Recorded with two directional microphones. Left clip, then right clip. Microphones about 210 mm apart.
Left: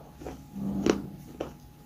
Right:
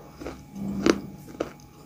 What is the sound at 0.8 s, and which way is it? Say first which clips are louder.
Scissors: right 4 dB; 25° right (ahead or behind).